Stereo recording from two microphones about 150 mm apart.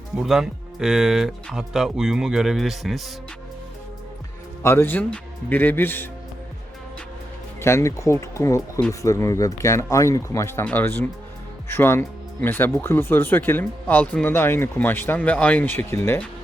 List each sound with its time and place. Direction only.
0.2 s speech: 5° right (ahead or behind)
4.6 s speech: 15° left (ahead or behind)
7.6 s speech: 20° left (ahead or behind)